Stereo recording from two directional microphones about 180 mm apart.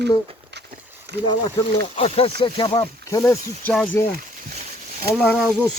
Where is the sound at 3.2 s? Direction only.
10° left (ahead or behind).